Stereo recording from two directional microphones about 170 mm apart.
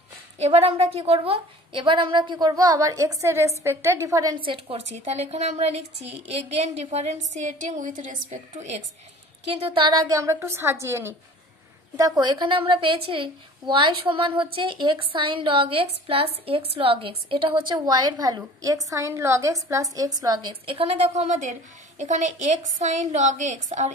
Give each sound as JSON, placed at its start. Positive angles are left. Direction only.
{"t": 0.4, "sound": "a woman's voice", "side_deg": -35}
{"t": 4.5, "sound": "a woman's voice", "side_deg": -35}
{"t": 12.2, "sound": "a woman's voice", "side_deg": -25}